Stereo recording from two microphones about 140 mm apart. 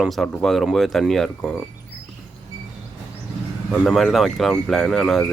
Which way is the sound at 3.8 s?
Centre (ahead or behind).